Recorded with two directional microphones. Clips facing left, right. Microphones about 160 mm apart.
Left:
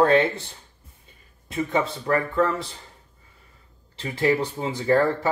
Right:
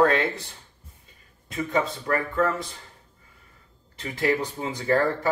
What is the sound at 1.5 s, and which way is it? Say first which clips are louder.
Speech: left 1 dB; 25° left (ahead or behind).